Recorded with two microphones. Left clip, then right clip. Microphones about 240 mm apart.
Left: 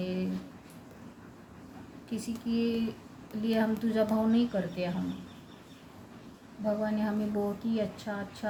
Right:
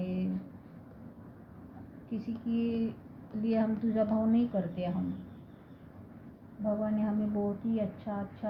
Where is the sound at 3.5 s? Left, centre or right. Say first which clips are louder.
Left 2 dB; left.